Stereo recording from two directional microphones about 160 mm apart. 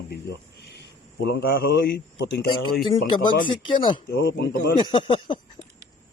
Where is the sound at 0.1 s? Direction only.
90° left.